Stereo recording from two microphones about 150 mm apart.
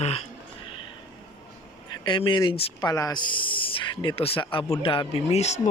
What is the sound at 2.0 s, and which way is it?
Speech, 35° left (ahead or behind).